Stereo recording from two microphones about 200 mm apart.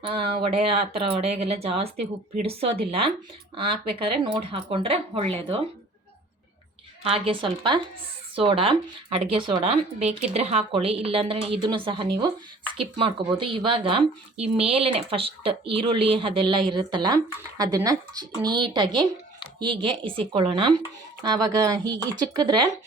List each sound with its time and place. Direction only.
0.1 s speech: 25° right (ahead or behind)
7.0 s speech: 25° right (ahead or behind)